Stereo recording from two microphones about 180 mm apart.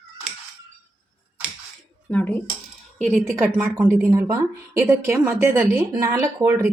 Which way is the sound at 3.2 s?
15° right (ahead or behind).